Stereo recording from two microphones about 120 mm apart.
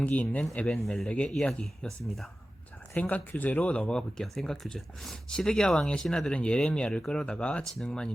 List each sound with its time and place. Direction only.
0.0 s speech: 10° left (ahead or behind)
2.9 s speech: 10° left (ahead or behind)